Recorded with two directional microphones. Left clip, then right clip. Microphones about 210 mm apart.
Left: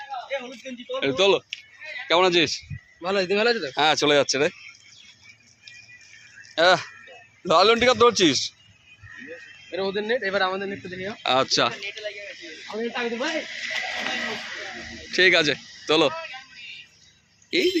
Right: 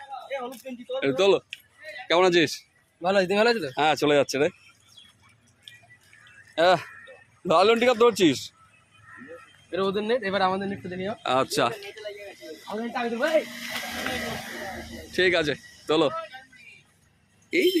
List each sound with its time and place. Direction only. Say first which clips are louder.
0.9 s speech: left 1 dB; 10° right (ahead or behind)
3.0 s speech: right 1 dB; 60° right (ahead or behind)
3.8 s speech: left 3 dB; 10° right (ahead or behind)
6.5 s a man's voice: left 2 dB; 5° right (ahead or behind)
9.7 s speech: even; 55° right (ahead or behind)
11.2 s speech: left 3 dB; 5° right (ahead or behind)
12.7 s sheep: left 2 dB; 40° right (ahead or behind)
15.1 s speech: left 4 dB; centre (ahead or behind)